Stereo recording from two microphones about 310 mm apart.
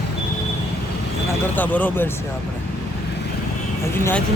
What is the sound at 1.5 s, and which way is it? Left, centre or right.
Speech, centre.